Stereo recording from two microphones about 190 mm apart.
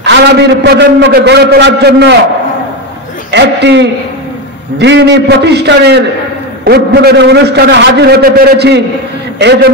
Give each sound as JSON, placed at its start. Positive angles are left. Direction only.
{"t": 0.0, "sound": "a man's voice", "side_deg": -65}
{"t": 3.3, "sound": "a man's voice", "side_deg": -65}